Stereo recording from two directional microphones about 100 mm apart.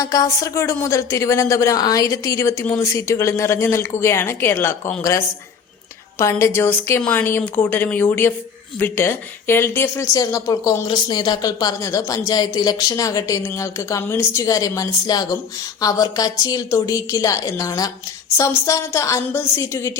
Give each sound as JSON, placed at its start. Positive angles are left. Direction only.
{"t": 0.0, "sound": "a woman's voice", "side_deg": 35}
{"t": 6.4, "sound": "a woman's voice", "side_deg": 25}
{"t": 10.8, "sound": "speech", "side_deg": 50}